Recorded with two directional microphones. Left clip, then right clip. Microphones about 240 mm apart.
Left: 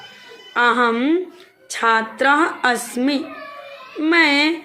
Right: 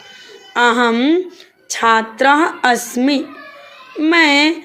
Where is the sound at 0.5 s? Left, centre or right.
Right.